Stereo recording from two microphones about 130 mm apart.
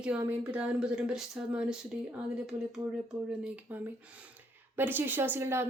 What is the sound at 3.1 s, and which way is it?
Speech, 5° right (ahead or behind).